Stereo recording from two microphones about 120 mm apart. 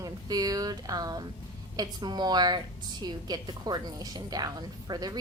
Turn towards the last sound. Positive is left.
turn(degrees=-35)  # may be behind; listen again after turning